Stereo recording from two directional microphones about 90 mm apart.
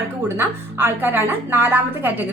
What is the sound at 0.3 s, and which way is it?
A woman's voice, 25° right (ahead or behind).